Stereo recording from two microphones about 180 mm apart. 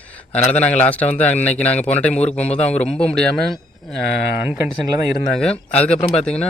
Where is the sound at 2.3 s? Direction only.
40° left (ahead or behind).